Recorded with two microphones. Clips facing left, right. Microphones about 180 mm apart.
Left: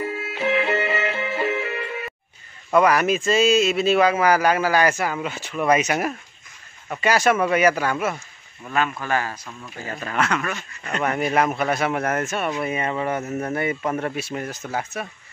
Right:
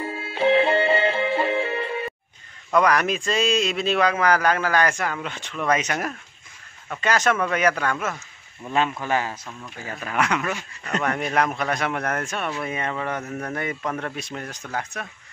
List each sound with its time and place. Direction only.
0.0 s music: 30° right (ahead or behind)
2.7 s speech: 5° left (ahead or behind)
8.6 s speech: 25° right (ahead or behind)
10.9 s speech: 5° left (ahead or behind)